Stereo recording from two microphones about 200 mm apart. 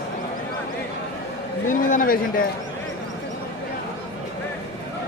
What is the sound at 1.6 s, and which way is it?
Speech, 40° left (ahead or behind).